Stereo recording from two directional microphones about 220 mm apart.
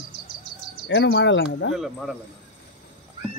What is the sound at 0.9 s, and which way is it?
Speech, 55° left (ahead or behind).